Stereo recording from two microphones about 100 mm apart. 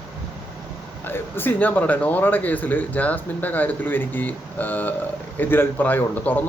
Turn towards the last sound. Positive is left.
turn(degrees=15)  # may be behind; listen again after turning